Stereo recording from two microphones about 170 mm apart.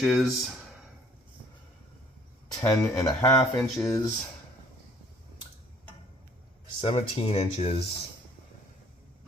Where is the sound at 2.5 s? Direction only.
20° left (ahead or behind).